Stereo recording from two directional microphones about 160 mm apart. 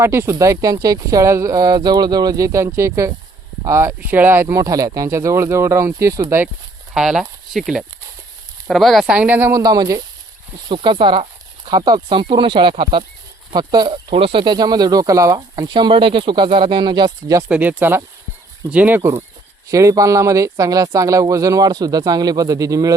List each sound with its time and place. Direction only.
0.0 s speech: 15° right (ahead or behind)
6.9 s speech: 5° right (ahead or behind); by 17.4 s 25° right (ahead or behind)
17.5 s speech: 10° right (ahead or behind)